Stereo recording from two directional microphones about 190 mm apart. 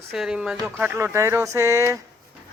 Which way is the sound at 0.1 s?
Centre (ahead or behind).